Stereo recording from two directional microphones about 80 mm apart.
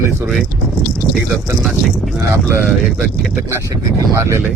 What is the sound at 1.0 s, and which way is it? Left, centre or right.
Speech, centre.